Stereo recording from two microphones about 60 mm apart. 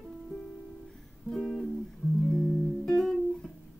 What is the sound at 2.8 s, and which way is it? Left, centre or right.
Music, centre.